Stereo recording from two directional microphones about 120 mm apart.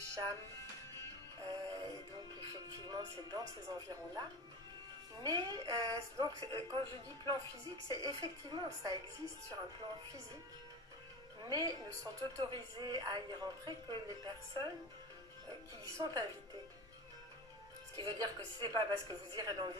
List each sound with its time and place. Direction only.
1.4 s music: 30° right (ahead or behind)
2.9 s a woman's voice: 30° right (ahead or behind)
11.4 s a woman's voice: 30° right (ahead or behind)
15.8 s a woman's voice: 30° right (ahead or behind)
18.0 s a woman's voice: 30° right (ahead or behind)